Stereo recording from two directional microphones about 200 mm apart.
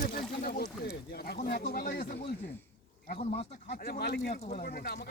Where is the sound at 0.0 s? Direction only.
50° left (ahead or behind).